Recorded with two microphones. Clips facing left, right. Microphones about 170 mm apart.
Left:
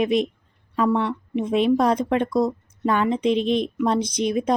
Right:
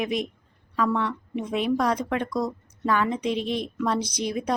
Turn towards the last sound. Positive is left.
turn(degrees=20)  # may be behind; listen again after turning